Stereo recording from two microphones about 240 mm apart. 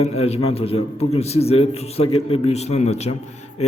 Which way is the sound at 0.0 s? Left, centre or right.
Left.